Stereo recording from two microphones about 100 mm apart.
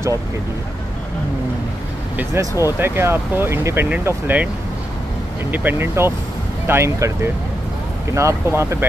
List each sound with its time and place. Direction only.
2.1 s speech: 25° right (ahead or behind)
5.5 s speech: 20° right (ahead or behind)
8.1 s speech: 30° right (ahead or behind)